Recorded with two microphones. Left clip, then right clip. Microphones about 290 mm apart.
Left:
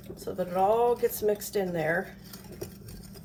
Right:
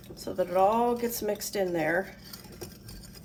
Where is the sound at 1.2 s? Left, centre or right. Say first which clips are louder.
Left 2 dB; centre.